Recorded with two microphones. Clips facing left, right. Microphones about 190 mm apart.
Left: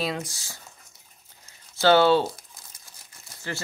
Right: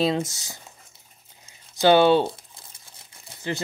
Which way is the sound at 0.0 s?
25° right (ahead or behind).